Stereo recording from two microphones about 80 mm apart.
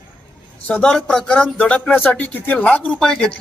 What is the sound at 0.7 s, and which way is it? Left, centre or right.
Speech, centre.